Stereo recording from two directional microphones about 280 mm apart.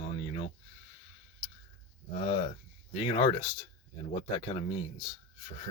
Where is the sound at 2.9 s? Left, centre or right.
Left.